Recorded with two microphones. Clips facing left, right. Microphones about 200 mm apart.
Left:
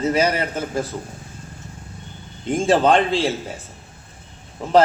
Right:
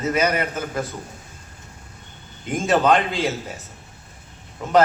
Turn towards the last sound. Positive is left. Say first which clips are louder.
# left 2 dB
turn(degrees=30)  # may be behind; listen again after turning